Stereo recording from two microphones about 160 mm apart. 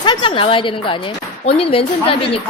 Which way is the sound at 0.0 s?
30° left (ahead or behind).